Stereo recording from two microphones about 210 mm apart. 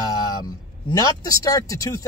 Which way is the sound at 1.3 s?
15° left (ahead or behind).